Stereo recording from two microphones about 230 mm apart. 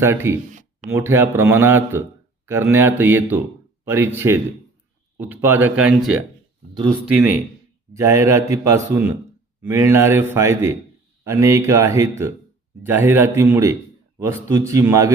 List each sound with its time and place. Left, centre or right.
0.0 s a man's voice: centre